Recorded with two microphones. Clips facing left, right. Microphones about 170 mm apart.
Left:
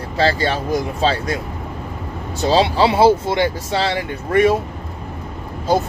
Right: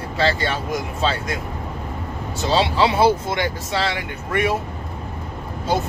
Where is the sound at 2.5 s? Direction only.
35° left (ahead or behind).